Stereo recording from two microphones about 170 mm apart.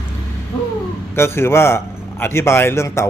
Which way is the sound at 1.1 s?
15° left (ahead or behind).